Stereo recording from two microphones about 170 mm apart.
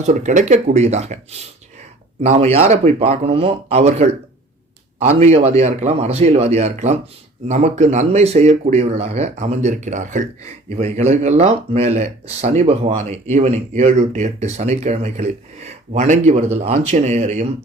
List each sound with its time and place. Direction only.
0.0 s speech: 45° right (ahead or behind)